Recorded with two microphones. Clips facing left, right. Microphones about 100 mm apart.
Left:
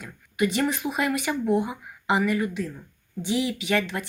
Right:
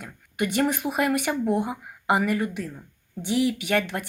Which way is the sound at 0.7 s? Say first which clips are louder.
Right 2 dB; 55° right (ahead or behind).